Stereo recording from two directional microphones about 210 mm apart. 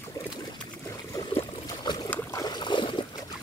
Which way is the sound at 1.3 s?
20° left (ahead or behind).